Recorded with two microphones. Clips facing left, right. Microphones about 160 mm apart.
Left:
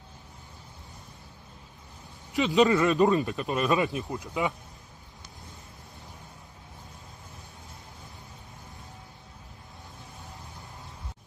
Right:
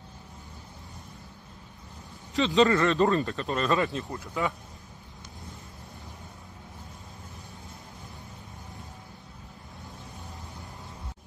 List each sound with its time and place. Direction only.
2.3 s speech: 15° left (ahead or behind)